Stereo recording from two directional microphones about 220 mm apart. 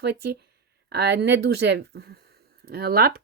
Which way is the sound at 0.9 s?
50° right (ahead or behind).